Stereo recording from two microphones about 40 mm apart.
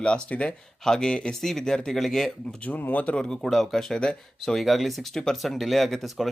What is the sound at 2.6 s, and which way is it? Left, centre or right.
Speech, left.